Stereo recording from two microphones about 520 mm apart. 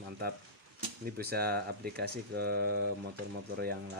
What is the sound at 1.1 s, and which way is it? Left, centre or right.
Speech, centre.